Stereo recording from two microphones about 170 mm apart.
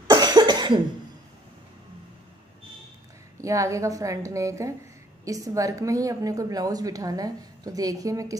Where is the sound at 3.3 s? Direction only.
20° right (ahead or behind).